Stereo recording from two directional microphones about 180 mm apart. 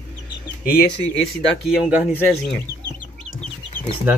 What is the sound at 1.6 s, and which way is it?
Speech, centre (ahead or behind).